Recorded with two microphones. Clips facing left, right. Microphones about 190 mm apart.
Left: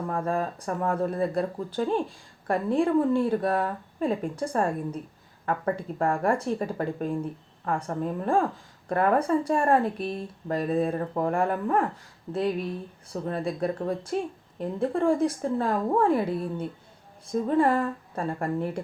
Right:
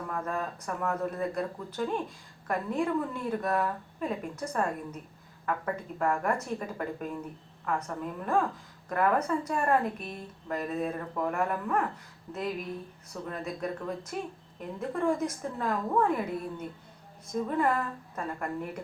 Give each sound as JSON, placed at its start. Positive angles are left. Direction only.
{"t": 0.1, "sound": "speech", "side_deg": 30}